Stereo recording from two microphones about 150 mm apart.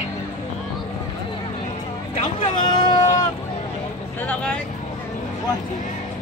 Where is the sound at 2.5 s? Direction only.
30° left (ahead or behind).